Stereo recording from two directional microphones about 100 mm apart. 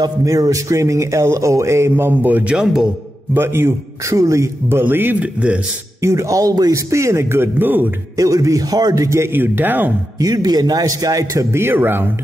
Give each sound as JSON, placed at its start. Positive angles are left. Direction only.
{"t": 0.0, "sound": "speech", "side_deg": -35}
{"t": 3.3, "sound": "speech", "side_deg": -25}
{"t": 6.0, "sound": "speech", "side_deg": -30}
{"t": 8.2, "sound": "speech", "side_deg": -35}
{"t": 10.2, "sound": "speech", "side_deg": -40}